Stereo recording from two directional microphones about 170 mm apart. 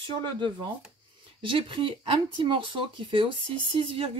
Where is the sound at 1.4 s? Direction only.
30° right (ahead or behind).